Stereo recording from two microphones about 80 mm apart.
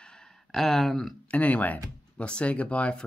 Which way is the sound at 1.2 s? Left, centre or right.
Centre.